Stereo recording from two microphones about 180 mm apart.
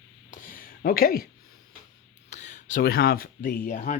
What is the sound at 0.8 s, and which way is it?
Speech, 55° left (ahead or behind).